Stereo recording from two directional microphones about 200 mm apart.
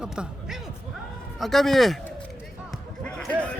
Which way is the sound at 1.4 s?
Centre (ahead or behind).